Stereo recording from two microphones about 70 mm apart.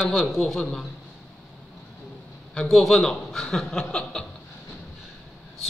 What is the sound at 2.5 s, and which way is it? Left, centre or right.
A man's voice, centre.